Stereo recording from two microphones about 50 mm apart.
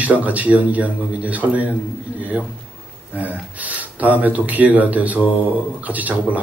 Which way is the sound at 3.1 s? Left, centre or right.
Right.